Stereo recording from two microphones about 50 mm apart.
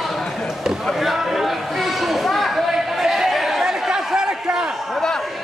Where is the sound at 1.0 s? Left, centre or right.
Centre; by 4.7 s right.